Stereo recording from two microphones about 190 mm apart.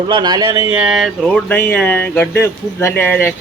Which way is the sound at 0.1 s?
20° right (ahead or behind).